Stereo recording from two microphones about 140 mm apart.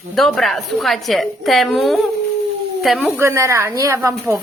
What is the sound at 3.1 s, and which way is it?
Speech, 20° right (ahead or behind).